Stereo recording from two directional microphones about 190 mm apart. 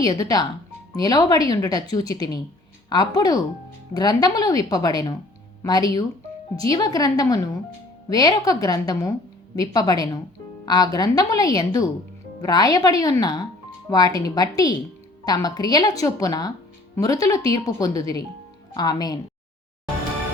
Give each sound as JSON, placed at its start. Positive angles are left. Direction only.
{"t": 0.0, "sound": "speech", "side_deg": 20}